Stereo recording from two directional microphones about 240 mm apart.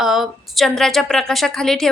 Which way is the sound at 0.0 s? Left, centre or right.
Centre.